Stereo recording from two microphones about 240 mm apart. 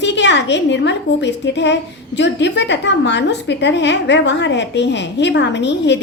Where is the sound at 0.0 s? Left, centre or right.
Left.